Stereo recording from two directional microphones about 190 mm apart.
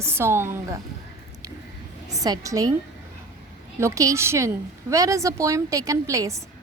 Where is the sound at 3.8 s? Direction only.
15° right (ahead or behind).